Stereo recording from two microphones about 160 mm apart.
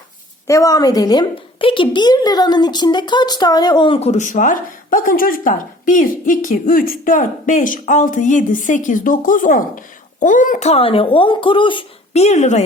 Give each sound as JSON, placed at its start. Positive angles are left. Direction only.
{"t": 0.4, "sound": "a woman's voice", "side_deg": 20}